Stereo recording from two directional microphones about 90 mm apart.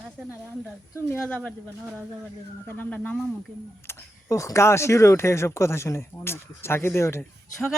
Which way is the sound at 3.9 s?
35° left (ahead or behind).